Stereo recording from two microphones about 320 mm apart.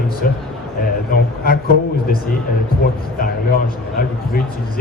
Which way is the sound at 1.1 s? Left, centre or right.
Left.